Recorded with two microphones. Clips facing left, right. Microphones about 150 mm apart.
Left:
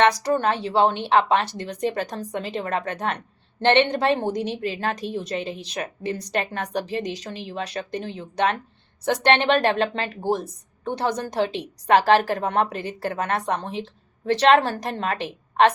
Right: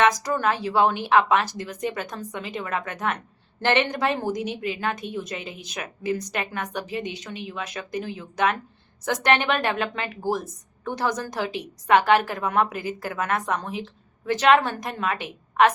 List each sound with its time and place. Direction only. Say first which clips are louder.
0.0 s a woman's voice: left 2 dB; 30° left (ahead or behind)